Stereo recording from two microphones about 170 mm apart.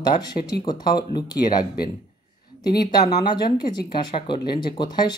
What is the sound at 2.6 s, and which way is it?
Speech, 25° left (ahead or behind).